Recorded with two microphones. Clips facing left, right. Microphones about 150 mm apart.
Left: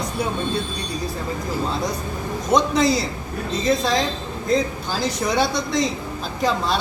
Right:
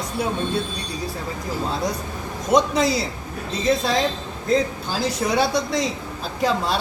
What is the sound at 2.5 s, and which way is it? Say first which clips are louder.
Speech: even; 10° right (ahead or behind).